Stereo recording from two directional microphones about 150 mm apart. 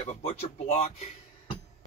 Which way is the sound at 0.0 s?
45° left (ahead or behind).